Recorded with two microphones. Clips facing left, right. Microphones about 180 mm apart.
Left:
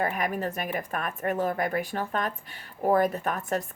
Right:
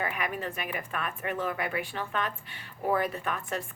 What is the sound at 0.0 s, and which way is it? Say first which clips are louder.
Speech: left 5 dB; 40° left (ahead or behind).